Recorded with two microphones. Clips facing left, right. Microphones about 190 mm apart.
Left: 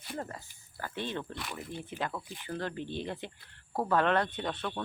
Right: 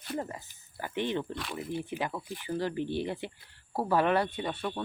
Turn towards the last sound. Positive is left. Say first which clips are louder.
# right 2 dB
turn(degrees=-10)  # may be behind; listen again after turning